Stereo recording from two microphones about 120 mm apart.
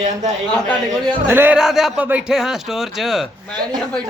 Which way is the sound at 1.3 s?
20° right (ahead or behind).